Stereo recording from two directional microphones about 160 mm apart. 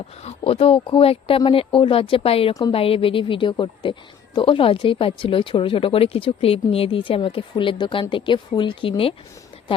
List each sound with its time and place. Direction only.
0.2 s speech: 40° left (ahead or behind)